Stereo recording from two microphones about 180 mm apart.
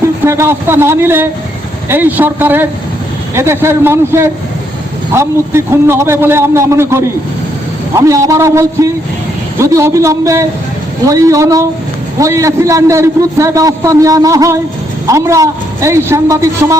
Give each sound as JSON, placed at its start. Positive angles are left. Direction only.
{"t": 0.0, "sound": "a man's voice", "side_deg": -15}